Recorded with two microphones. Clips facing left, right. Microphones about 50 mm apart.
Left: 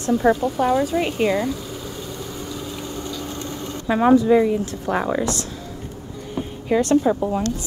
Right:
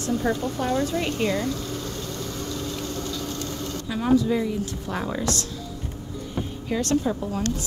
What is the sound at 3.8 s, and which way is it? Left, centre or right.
Speech, left.